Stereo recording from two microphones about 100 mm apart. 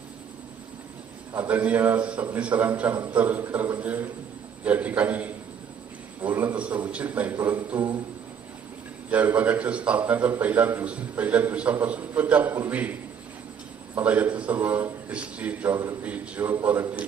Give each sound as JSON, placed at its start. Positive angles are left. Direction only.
{"t": 1.4, "sound": "a man's voice", "side_deg": -15}
{"t": 9.0, "sound": "a man's voice", "side_deg": -15}